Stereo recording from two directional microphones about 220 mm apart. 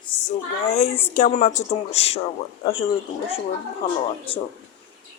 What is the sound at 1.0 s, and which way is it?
Speech, 35° left (ahead or behind).